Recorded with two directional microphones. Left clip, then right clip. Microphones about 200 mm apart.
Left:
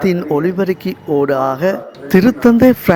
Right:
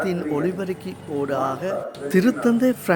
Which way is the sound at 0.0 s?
40° left (ahead or behind).